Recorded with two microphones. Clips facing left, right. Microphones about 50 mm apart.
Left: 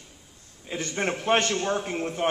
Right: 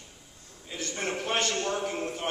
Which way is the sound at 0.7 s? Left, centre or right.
Left.